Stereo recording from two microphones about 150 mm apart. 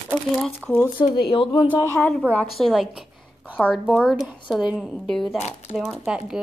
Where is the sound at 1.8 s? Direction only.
15° left (ahead or behind).